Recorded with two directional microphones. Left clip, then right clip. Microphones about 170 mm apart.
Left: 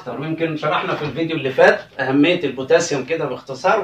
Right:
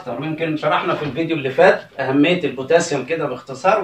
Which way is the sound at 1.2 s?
15° left (ahead or behind).